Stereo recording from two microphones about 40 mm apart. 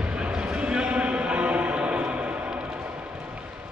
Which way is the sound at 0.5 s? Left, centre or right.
Right.